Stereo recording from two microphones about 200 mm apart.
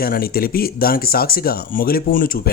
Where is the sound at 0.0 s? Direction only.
50° left (ahead or behind).